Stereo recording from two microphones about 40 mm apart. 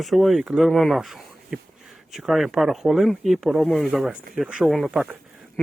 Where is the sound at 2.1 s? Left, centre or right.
Centre.